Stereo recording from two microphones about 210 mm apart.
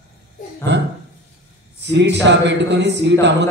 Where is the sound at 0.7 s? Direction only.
55° right (ahead or behind).